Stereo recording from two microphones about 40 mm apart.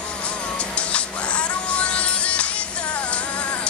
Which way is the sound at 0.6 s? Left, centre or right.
Left.